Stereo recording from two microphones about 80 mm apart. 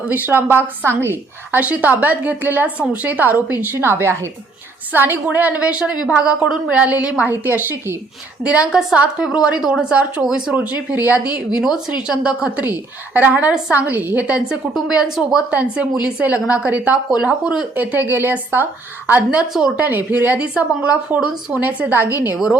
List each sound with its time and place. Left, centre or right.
0.1 s speech: right
8.4 s speech: centre
10.5 s speech: centre
11.5 s speech: centre; by 22.1 s right